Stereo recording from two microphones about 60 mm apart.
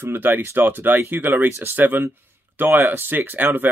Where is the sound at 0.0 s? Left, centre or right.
Right.